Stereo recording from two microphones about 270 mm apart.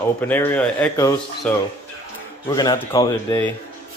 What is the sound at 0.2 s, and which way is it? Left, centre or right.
Speech, centre.